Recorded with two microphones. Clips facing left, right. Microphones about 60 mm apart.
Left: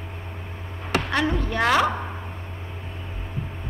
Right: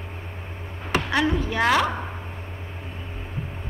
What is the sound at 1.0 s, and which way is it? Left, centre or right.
Speech, centre.